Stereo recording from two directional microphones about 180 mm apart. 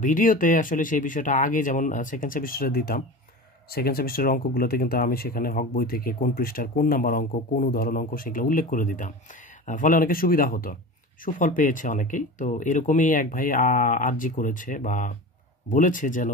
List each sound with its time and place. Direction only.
0.0 s speech: 45° left (ahead or behind)